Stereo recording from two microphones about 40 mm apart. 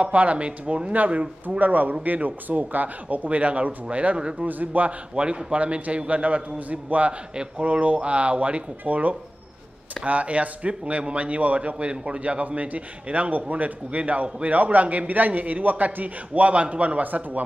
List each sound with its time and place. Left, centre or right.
0.0 s a man's voice: right
4.5 s a man's voice: right
5.1 s a man's voice: right